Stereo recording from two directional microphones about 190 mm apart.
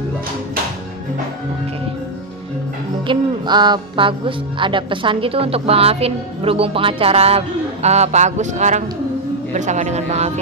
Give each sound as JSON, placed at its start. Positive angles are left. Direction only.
{"t": 3.1, "sound": "music", "side_deg": -25}
{"t": 4.6, "sound": "a woman's voice", "side_deg": -25}